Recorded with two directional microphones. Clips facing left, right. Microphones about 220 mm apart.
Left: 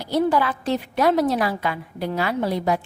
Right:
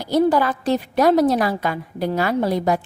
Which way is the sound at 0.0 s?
40° right (ahead or behind).